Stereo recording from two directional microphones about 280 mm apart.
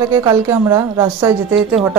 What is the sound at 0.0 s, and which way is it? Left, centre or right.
A woman's voice, centre.